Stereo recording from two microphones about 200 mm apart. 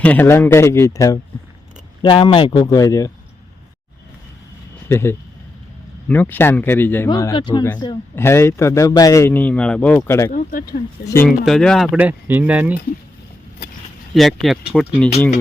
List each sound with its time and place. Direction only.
0.0 s a man's voice: 10° left (ahead or behind)
4.9 s a man's voice: 10° left (ahead or behind)
8.1 s a man's voice: 10° left (ahead or behind)
10.3 s speech: 45° left (ahead or behind)
11.0 s a man's voice: 15° left (ahead or behind)
11.3 s speech: centre (ahead or behind)
14.1 s speech: centre (ahead or behind)